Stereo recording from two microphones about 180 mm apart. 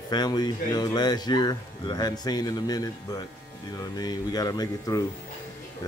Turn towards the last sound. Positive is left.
turn(degrees=20)  # may be behind; listen again after turning